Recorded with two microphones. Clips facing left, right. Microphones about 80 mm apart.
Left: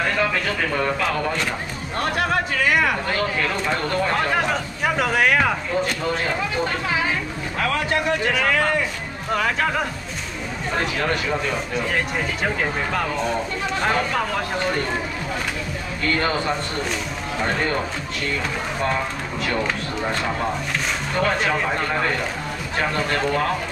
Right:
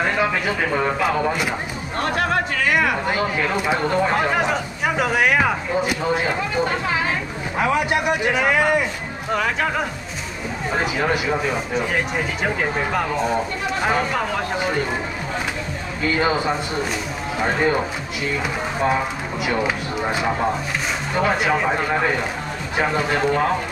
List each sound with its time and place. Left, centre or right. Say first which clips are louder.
0.0 s speech: right 2 dB; centre
2.0 s chatter: right 1 dB; centre
3.1 s speech: right 2 dB; centre
9.3 s speech: even; centre
16.0 s speech: right 2 dB; centre